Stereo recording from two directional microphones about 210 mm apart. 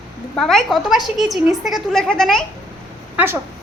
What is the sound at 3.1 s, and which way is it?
Speech, 10° right (ahead or behind).